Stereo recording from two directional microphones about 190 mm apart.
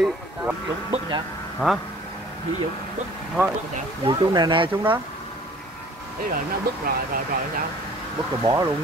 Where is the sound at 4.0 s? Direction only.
25° right (ahead or behind).